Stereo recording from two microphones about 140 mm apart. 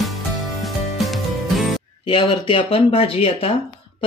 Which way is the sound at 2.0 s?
40° left (ahead or behind).